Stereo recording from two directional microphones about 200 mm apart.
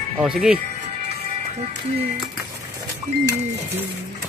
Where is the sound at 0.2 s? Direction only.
5° right (ahead or behind).